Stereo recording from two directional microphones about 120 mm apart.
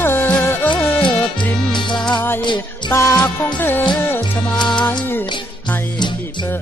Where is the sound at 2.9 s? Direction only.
25° left (ahead or behind).